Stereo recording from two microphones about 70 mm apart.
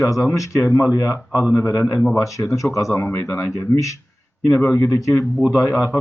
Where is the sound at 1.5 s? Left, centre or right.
Left.